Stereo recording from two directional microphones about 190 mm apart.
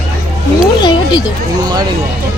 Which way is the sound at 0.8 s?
25° left (ahead or behind).